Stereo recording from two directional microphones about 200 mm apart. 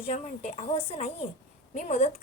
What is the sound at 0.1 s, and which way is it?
A woman's voice, 30° left (ahead or behind).